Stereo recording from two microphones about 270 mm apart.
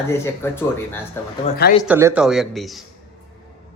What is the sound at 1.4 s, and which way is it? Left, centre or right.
Speech, left.